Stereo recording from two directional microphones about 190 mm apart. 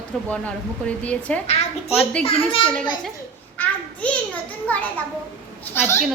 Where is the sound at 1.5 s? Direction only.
35° left (ahead or behind).